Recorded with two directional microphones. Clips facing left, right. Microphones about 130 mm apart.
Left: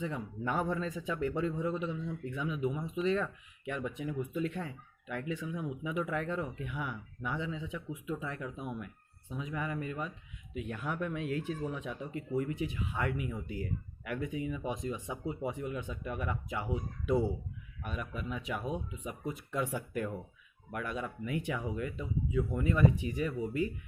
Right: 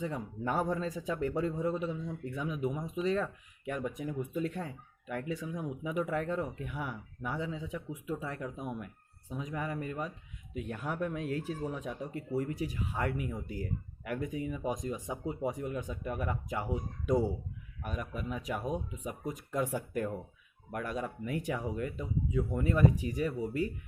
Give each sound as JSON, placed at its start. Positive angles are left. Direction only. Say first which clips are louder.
{"t": 0.0, "sound": "speech", "louder": "right 1 dB", "side_deg": -40}